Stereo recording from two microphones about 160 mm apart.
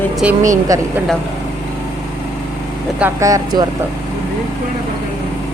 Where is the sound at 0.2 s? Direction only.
5° right (ahead or behind).